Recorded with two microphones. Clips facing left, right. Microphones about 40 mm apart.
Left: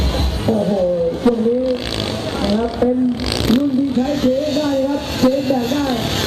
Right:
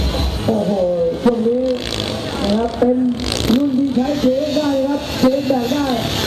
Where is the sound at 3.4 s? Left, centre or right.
Centre.